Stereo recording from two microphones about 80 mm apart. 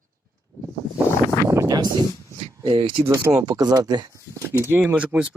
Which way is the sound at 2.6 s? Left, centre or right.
Right.